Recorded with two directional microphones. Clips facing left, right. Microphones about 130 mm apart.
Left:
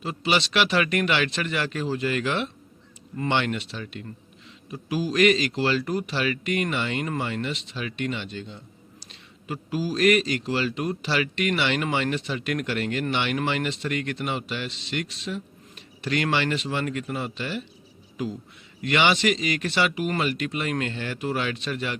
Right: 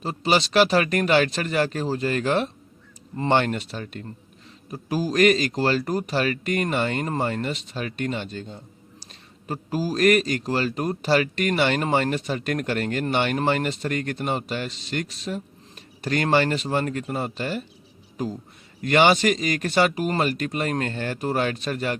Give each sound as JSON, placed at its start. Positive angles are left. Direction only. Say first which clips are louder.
{"t": 0.0, "sound": "a man's voice", "louder": "right 3 dB", "side_deg": -40}